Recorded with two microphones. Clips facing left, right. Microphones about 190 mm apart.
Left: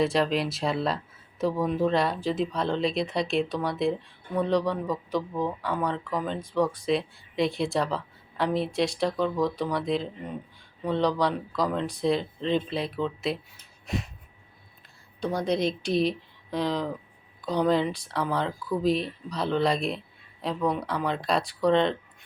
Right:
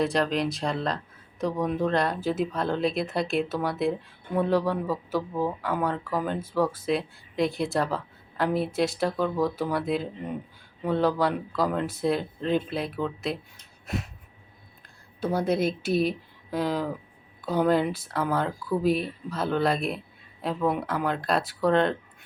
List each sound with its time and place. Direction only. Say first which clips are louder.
0.0 s speech: even; centre (ahead or behind)
13.8 s a sound: left 1 dB; centre (ahead or behind)
15.2 s speech: right 1 dB; 5° right (ahead or behind)